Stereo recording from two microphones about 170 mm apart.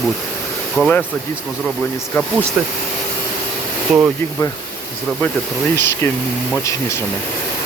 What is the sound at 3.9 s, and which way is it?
Speech, 5° right (ahead or behind).